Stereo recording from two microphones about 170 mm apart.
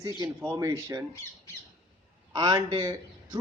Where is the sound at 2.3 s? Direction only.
25° right (ahead or behind).